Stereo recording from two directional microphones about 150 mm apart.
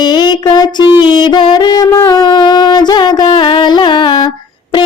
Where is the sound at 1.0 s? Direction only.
30° left (ahead or behind).